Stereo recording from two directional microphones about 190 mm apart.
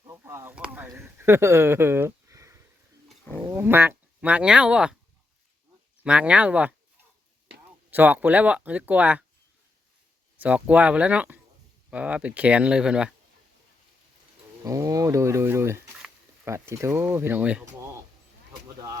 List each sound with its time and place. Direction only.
0.0 s a sound: 15° right (ahead or behind)
3.1 s roaring cats: centre (ahead or behind)
3.4 s speech: 10° right (ahead or behind)
6.0 s speech: 5° right (ahead or behind)
7.9 s speech: 10° right (ahead or behind)
10.4 s speech: 10° right (ahead or behind)
14.6 s speech: 15° right (ahead or behind)
16.0 s a sound: 5° right (ahead or behind)
16.5 s speech: 15° right (ahead or behind)